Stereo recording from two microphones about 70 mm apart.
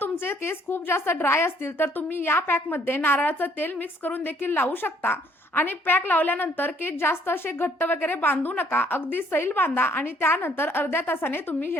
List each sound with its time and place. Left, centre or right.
0.0 s a woman's voice: left